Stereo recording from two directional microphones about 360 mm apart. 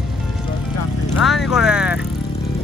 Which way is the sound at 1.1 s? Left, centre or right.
Centre.